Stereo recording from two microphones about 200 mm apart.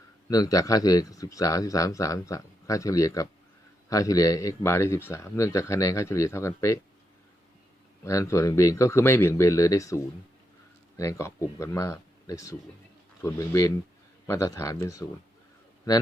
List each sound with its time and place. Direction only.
0.3 s speech: 15° left (ahead or behind)
8.0 s speech: 15° left (ahead or behind)